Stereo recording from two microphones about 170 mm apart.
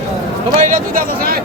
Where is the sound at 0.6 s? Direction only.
55° right (ahead or behind).